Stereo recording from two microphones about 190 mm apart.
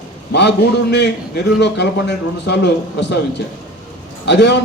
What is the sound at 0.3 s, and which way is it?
A man's voice, 65° left (ahead or behind).